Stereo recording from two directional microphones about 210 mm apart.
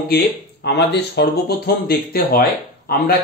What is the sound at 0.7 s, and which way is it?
Speech, 50° left (ahead or behind).